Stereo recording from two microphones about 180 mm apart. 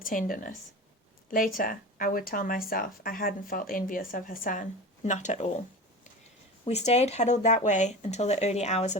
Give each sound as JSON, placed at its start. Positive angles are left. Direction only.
{"t": 0.0, "sound": "speech", "side_deg": 50}
{"t": 6.7, "sound": "speech", "side_deg": 35}